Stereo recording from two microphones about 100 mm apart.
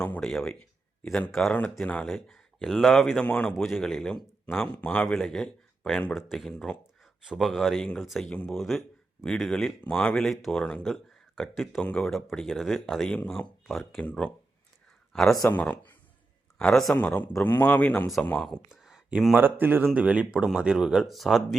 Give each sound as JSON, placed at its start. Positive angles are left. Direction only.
{"t": 0.0, "sound": "speech", "side_deg": 10}
{"t": 1.8, "sound": "speech", "side_deg": 15}
{"t": 3.5, "sound": "speech", "side_deg": 0}
{"t": 8.3, "sound": "speech", "side_deg": 10}
{"t": 8.5, "sound": "speech", "side_deg": 0}
{"t": 11.8, "sound": "speech", "side_deg": 10}
{"t": 14.0, "sound": "speech", "side_deg": 10}
{"t": 15.4, "sound": "speech", "side_deg": 15}
{"t": 16.6, "sound": "speech", "side_deg": 5}
{"t": 16.9, "sound": "a man's voice", "side_deg": 20}
{"t": 18.7, "sound": "a sound", "side_deg": -5}
{"t": 19.4, "sound": "speech", "side_deg": -20}